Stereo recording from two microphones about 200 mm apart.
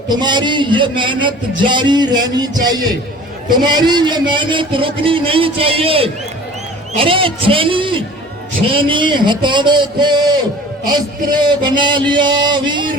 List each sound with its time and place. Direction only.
0.1 s music: 20° right (ahead or behind)